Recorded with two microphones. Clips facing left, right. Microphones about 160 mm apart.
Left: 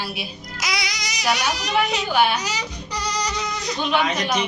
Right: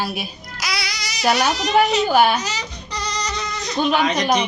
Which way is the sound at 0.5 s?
20° left (ahead or behind).